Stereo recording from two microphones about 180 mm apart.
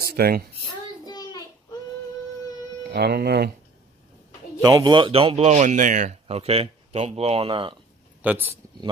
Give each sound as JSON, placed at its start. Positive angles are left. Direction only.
{"t": 0.0, "sound": "a sound", "side_deg": -60}
{"t": 1.0, "sound": "child singing", "side_deg": 20}
{"t": 2.9, "sound": "speech", "side_deg": -65}
{"t": 4.6, "sound": "speech", "side_deg": -20}
{"t": 8.2, "sound": "speech", "side_deg": -10}